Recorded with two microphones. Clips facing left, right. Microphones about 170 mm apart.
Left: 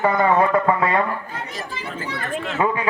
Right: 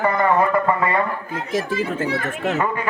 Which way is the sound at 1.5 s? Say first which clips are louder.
Right 14 dB; 80° right.